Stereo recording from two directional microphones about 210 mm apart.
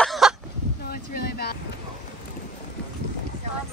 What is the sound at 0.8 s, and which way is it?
Boat, 45° left (ahead or behind).